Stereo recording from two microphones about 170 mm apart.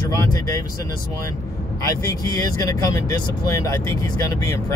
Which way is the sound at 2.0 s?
20° left (ahead or behind).